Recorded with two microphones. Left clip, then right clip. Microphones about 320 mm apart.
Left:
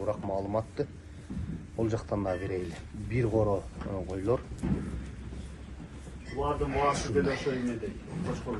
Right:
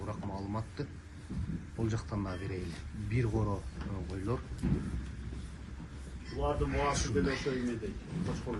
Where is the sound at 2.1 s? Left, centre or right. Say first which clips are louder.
Left 8 dB; left.